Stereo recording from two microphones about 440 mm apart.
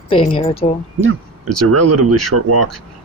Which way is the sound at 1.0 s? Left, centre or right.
Right.